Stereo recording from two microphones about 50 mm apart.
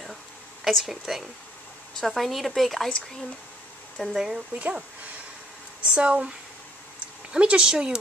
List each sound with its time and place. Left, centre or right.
0.7 s speech: centre
4.2 s speech: centre
4.6 s speech: right
5.9 s speech: right
7.3 s speech: right